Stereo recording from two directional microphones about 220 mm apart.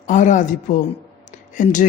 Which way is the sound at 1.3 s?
35° left (ahead or behind).